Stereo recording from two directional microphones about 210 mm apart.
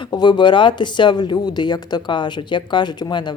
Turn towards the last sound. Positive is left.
turn(degrees=20)  # may be behind; listen again after turning